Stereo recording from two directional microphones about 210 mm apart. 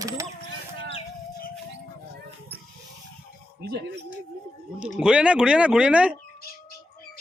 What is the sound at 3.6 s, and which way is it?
Speech, 50° right (ahead or behind).